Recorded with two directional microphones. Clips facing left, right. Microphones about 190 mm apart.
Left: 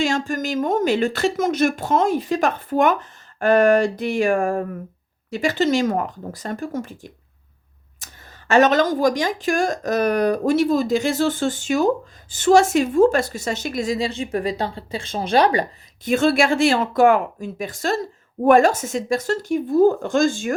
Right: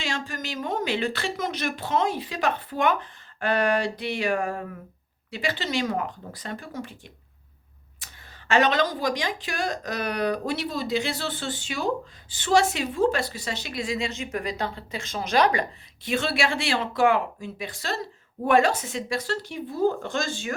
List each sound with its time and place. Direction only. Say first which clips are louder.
0.0 s a woman's voice: left 10 dB; 45° left (ahead or behind)
16.0 s a woman's voice: left 8 dB; 45° left (ahead or behind)